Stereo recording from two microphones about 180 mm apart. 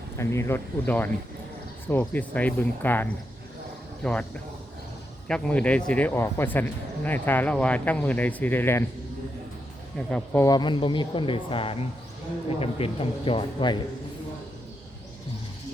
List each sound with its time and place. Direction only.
0.2 s speech: 15° left (ahead or behind)
5.3 s speech: 5° left (ahead or behind)
10.1 s speech: 5° left (ahead or behind)
10.4 s speech: 25° left (ahead or behind)